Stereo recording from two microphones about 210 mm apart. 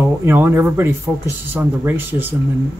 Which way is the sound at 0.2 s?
10° right (ahead or behind).